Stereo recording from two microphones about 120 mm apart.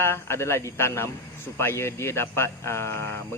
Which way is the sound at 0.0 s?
20° left (ahead or behind).